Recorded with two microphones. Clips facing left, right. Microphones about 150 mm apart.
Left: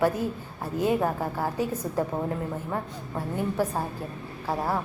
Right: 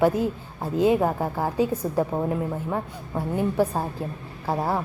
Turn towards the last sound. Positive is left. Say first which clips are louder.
# right 3 dB
turn(degrees=-15)  # may be behind; listen again after turning